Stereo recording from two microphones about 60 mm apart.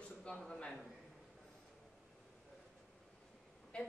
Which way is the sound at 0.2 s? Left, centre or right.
Centre.